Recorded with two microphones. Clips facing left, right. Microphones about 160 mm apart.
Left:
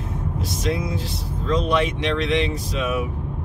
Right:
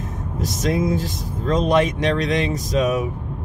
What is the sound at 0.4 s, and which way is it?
Speech, 45° right (ahead or behind).